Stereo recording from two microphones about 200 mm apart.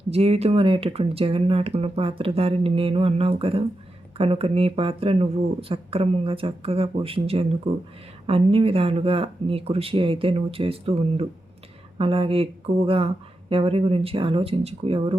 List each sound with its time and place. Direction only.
0.1 s speech: 30° right (ahead or behind)